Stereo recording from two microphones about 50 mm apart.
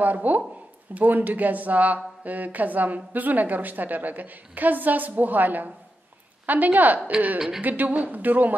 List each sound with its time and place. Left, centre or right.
0.0 s a woman's voice: right
7.3 s a woman's voice: centre
7.6 s a woman's voice: right